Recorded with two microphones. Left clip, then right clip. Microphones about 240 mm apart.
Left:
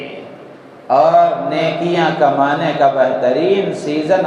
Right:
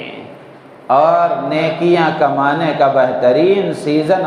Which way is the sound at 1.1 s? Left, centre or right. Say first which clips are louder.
Left 1 dB; right.